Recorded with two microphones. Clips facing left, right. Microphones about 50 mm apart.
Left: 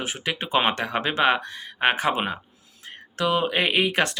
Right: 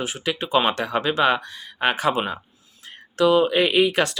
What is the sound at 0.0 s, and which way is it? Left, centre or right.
Speech, left.